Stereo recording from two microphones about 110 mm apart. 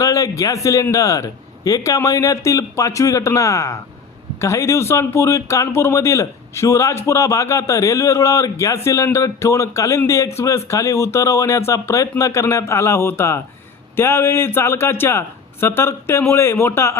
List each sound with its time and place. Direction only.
0.0 s speech: 30° left (ahead or behind)